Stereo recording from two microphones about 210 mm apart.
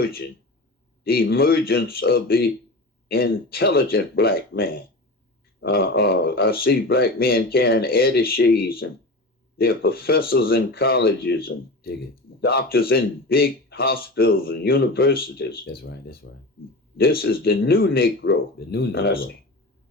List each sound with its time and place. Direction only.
1.0 s speech: 45° left (ahead or behind)